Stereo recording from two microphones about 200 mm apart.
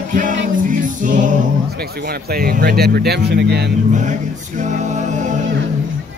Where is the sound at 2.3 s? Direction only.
50° right (ahead or behind).